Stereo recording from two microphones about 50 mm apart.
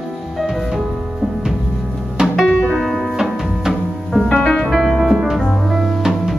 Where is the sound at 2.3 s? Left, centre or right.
Centre.